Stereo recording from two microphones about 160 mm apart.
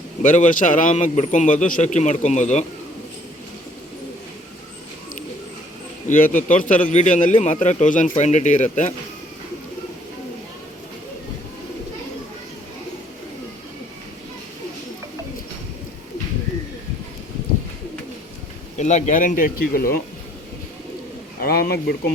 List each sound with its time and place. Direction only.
0.2 s a man's voice: 50° left (ahead or behind)
6.1 s a man's voice: 55° left (ahead or behind)
18.8 s speech: 50° left (ahead or behind); by 20.0 s 65° left (ahead or behind)
21.4 s speech: 70° left (ahead or behind)